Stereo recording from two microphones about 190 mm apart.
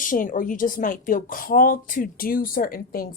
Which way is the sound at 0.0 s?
45° left (ahead or behind).